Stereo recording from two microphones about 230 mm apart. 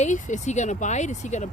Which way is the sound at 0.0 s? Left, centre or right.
Left.